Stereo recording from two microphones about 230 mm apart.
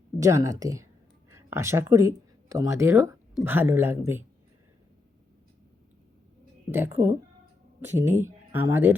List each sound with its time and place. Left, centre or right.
0.2 s a man's voice: centre
6.7 s a man's voice: centre